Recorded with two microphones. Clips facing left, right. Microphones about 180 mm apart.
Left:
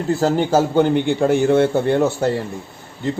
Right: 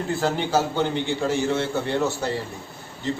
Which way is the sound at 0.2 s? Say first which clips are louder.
Left 6 dB; 40° left (ahead or behind).